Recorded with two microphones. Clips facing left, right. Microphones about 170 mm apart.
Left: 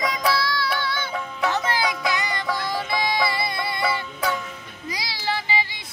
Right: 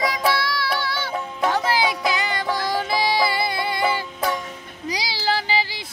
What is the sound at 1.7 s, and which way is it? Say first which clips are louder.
Music: right 3 dB; 30° right (ahead or behind).